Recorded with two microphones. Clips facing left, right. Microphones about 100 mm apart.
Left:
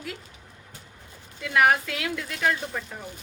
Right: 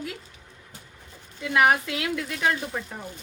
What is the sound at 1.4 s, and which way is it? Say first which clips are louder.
A woman's voice: even; 20° right (ahead or behind).